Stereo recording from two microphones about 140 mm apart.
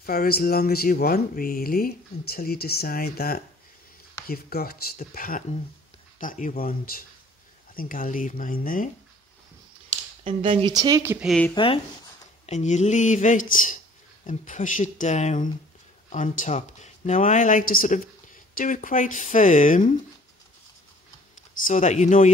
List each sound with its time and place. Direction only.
0.0 s speech: 90° left
6.1 s speech: 65° left (ahead or behind)
10.2 s speech: 40° right (ahead or behind)
10.7 s speech: 25° right (ahead or behind)
11.1 s speech: centre (ahead or behind)
11.5 s speech: 40° left (ahead or behind)
12.4 s speech: 55° left (ahead or behind)
21.6 s speech: 60° left (ahead or behind)